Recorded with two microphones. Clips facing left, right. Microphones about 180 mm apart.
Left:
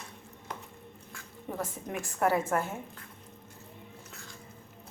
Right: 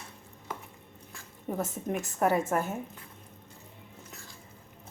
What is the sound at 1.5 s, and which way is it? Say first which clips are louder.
A woman's voice: right 4 dB; 20° right (ahead or behind).